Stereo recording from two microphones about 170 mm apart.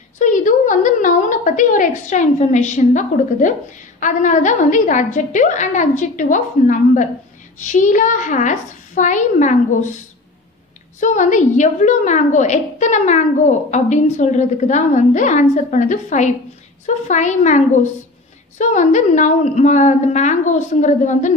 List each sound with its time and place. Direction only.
0.2 s a woman's voice: 50° left (ahead or behind)
11.0 s a woman's voice: 45° left (ahead or behind)
18.6 s a woman's voice: 45° left (ahead or behind)